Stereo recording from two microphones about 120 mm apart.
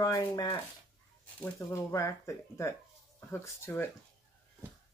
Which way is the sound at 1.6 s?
25° left (ahead or behind).